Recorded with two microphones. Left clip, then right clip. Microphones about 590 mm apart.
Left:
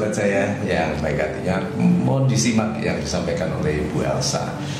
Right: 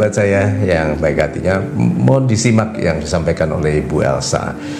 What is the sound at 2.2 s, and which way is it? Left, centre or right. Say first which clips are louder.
Speech: right 5 dB; right.